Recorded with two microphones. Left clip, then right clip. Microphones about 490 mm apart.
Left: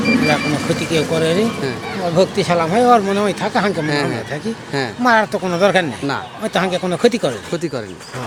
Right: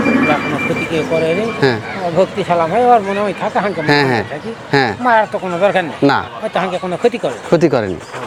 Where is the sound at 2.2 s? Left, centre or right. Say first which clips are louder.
Right 2 dB; left.